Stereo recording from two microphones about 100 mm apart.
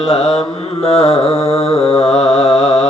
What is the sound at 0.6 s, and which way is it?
Mantra, 90° left.